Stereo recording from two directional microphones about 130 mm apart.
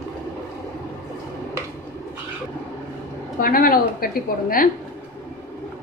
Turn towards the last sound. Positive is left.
turn(degrees=90)